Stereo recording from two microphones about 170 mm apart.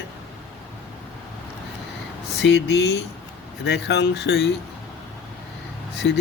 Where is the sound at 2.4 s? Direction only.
90° left.